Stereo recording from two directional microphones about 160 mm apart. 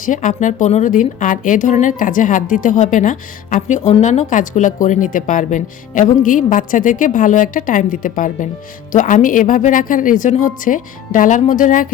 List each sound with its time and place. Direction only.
0.0 s a woman's voice: 55° left (ahead or behind)